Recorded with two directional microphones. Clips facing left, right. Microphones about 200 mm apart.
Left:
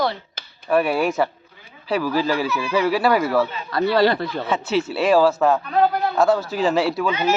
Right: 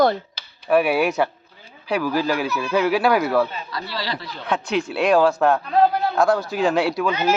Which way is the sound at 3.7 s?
55° left (ahead or behind).